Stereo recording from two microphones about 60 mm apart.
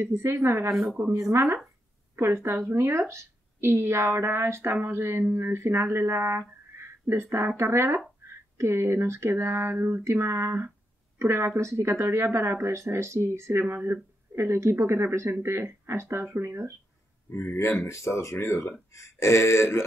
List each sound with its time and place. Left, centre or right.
0.0 s a woman's voice: right
2.1 s a woman's voice: right
8.2 s a sound: right
8.5 s a woman's voice: right
17.3 s speech: left